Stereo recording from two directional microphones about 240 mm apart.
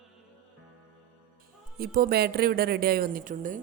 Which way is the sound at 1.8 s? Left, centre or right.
Right.